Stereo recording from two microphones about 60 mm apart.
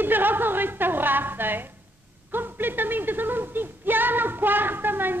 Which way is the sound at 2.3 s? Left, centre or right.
Right.